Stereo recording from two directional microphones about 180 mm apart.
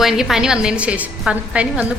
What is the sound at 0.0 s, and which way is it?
A woman's voice, centre (ahead or behind).